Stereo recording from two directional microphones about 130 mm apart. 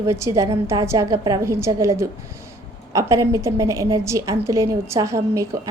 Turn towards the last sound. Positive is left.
turn(degrees=-25)  # may be behind; listen again after turning